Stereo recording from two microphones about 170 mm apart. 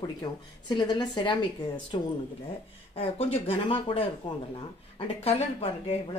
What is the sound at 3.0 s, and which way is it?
A woman's voice, 35° left (ahead or behind).